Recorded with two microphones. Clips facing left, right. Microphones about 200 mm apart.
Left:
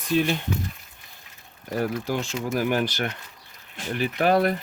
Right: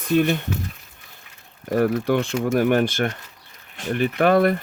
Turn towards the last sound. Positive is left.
turn(degrees=-55)  # may be behind; listen again after turning